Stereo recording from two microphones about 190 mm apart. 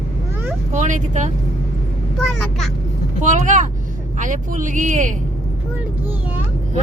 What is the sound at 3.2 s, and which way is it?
A woman's voice, 40° right (ahead or behind).